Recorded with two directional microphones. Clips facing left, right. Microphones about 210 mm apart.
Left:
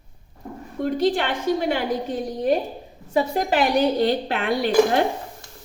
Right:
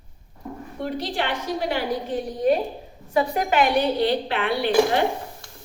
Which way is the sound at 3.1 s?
35° left (ahead or behind).